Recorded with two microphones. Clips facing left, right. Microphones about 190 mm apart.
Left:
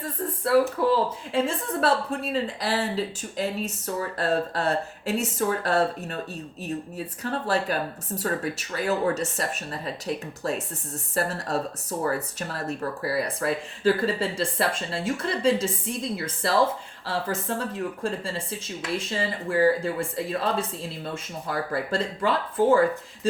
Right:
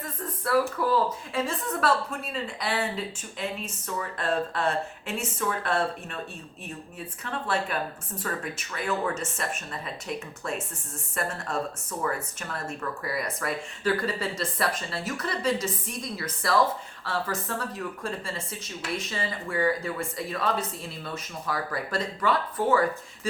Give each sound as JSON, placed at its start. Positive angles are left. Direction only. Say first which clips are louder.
{"t": 0.0, "sound": "a woman's voice", "louder": "left 5 dB", "side_deg": 30}